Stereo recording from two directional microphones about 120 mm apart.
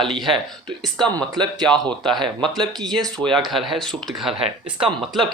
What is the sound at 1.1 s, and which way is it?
Speech, 35° right (ahead or behind).